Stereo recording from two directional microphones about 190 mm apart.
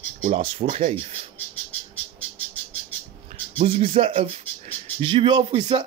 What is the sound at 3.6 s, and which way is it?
Speech, 30° right (ahead or behind).